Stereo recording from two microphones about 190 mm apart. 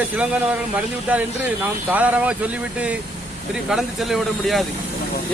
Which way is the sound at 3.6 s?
Centre (ahead or behind).